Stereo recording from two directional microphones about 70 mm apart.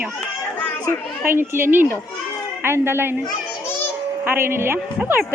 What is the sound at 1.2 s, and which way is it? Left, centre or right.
Speech, right.